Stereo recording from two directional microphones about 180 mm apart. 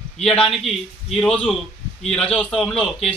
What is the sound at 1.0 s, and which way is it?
A man's voice, 5° left (ahead or behind).